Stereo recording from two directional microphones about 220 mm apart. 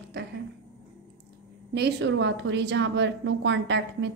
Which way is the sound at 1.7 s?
50° right (ahead or behind).